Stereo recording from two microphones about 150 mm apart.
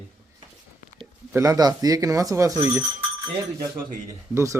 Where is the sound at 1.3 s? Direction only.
25° right (ahead or behind).